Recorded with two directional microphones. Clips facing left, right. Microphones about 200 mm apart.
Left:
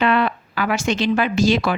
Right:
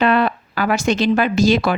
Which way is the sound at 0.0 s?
40° right (ahead or behind).